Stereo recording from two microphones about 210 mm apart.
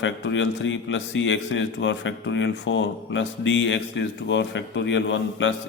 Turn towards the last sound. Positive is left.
turn(degrees=60)  # may be behind; listen again after turning